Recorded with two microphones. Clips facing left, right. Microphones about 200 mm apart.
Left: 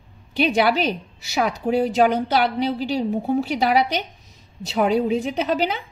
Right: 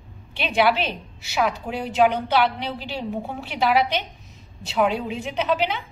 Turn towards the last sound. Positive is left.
turn(degrees=40)  # may be behind; listen again after turning